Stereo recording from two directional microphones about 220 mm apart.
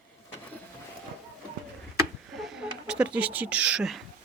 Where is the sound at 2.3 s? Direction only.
Centre (ahead or behind).